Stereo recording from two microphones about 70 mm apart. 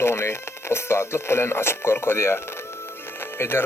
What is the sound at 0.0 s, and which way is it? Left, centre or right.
Speech, left.